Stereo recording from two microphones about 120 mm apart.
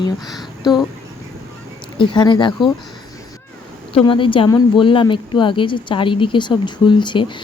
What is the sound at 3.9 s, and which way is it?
Speech, 45° left (ahead or behind).